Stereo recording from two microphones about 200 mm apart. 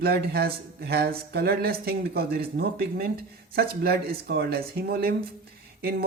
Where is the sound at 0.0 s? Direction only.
50° right (ahead or behind).